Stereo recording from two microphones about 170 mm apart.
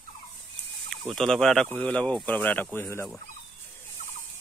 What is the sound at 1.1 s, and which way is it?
Speech, centre (ahead or behind).